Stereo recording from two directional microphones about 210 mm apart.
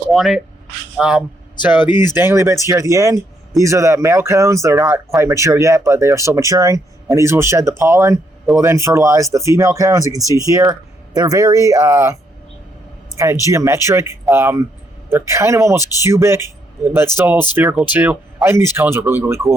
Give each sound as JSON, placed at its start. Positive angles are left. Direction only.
{"t": 0.1, "sound": "speech", "side_deg": 0}
{"t": 13.5, "sound": "speech", "side_deg": -15}